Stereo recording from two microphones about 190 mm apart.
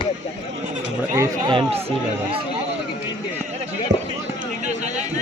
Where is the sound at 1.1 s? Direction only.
15° right (ahead or behind).